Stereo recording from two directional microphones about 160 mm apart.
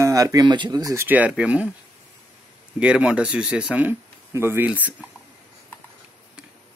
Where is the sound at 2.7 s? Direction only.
5° right (ahead or behind).